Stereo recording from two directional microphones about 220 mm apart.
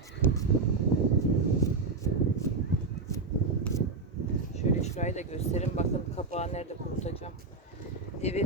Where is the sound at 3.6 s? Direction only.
15° left (ahead or behind).